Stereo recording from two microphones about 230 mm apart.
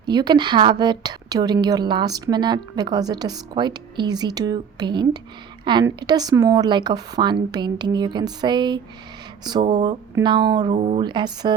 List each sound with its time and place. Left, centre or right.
0.0 s a woman's voice: centre